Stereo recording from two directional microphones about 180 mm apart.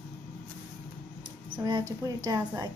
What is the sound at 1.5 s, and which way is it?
A woman's voice, 25° right (ahead or behind).